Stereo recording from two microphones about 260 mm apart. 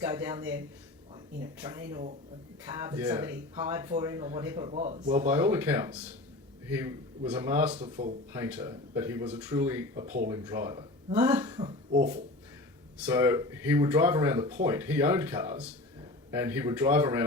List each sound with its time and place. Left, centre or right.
0.0 s speech: centre
1.6 s speech: centre
3.5 s speech: right; by 7.7 s centre
7.7 s speech: right
13.1 s speech: centre